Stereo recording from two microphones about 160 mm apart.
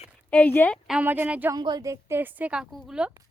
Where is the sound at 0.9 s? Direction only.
10° right (ahead or behind).